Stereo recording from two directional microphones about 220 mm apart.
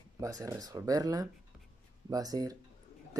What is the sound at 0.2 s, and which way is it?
Speech, 15° right (ahead or behind).